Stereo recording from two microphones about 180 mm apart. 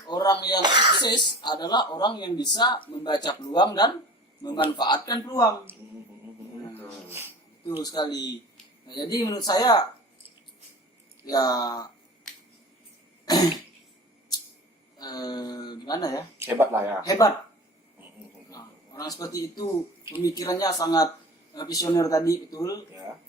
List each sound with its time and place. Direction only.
0.1 s speech: 25° left (ahead or behind)
0.6 s speech: 25° right (ahead or behind)
1.4 s speech: 25° left (ahead or behind)
5.7 s speech: 15° right (ahead or behind)
7.8 s speech: 20° left (ahead or behind)
11.3 s speech: 20° left (ahead or behind)
13.2 s throat clearing: 20° left (ahead or behind)
14.9 s speech: 20° left (ahead or behind)
16.4 s speech: 15° right (ahead or behind)
17.1 s speech: 20° left (ahead or behind)
18.5 s a sound: 20° left (ahead or behind)
20.1 s speech: 25° left (ahead or behind)